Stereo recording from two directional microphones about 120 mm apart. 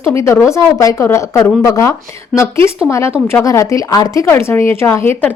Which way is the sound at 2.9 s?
25° left (ahead or behind).